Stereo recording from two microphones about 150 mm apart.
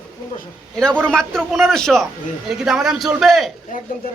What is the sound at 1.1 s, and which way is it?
A man's voice, 5° left (ahead or behind).